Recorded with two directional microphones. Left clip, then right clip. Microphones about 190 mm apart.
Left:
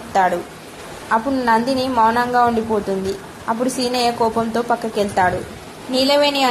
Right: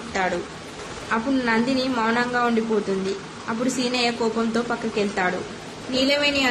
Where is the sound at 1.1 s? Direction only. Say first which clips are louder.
Left 6 dB; 5° left (ahead or behind).